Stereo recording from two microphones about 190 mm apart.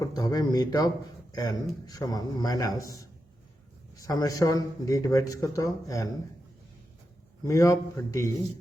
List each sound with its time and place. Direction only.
0.0 s speech: 20° left (ahead or behind)
7.4 s speech: 15° left (ahead or behind)